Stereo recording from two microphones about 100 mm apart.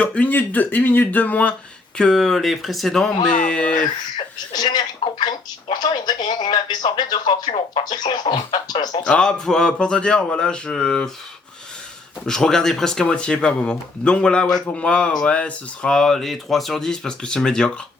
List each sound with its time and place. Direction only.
0.0 s speech: 15° left (ahead or behind)
4.5 s speech: 45° left (ahead or behind)
7.5 s speech: 65° left (ahead or behind)
7.9 s speech: 45° left (ahead or behind)
9.0 s speech: 10° left (ahead or behind)
12.2 s speech: 5° left (ahead or behind)